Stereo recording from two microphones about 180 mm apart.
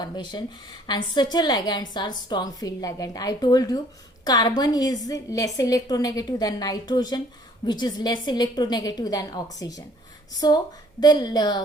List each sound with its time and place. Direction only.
0.0 s a woman's voice: 25° left (ahead or behind)
11.0 s a woman's voice: 20° left (ahead or behind)